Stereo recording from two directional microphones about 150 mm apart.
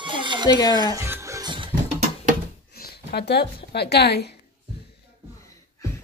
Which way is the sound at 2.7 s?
90° left.